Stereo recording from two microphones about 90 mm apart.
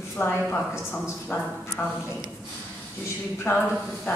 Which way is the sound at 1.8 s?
30° left (ahead or behind).